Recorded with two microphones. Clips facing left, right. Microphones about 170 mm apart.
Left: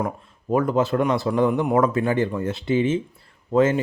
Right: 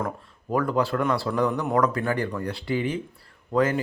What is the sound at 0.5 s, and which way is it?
Speech, 20° left (ahead or behind).